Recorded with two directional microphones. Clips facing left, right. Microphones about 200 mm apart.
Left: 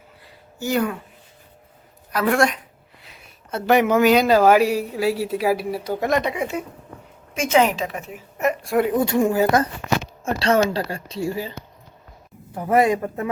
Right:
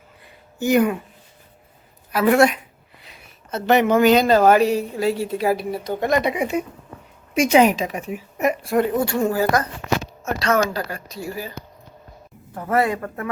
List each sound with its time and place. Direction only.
0.6 s a woman's voice: 15° right (ahead or behind)
2.1 s speech: 5° right (ahead or behind)
3.0 s speech: 5° left (ahead or behind)
6.2 s a woman's voice: 15° right (ahead or behind)
8.6 s speech: centre (ahead or behind)
8.9 s a woman's voice: 15° left (ahead or behind)
12.5 s speech: 15° left (ahead or behind)